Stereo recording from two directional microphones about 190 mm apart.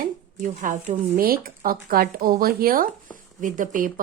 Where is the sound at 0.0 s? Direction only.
45° right (ahead or behind).